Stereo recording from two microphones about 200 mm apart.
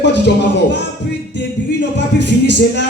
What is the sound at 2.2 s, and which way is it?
Speech, 60° left (ahead or behind).